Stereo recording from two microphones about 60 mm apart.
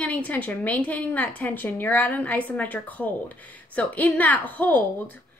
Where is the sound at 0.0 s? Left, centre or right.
Left.